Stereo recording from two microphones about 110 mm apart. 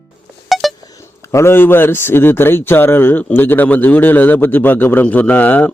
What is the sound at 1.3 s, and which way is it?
A man's voice, 20° left (ahead or behind).